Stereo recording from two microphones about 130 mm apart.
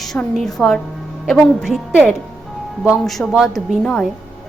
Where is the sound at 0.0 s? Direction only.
Centre (ahead or behind).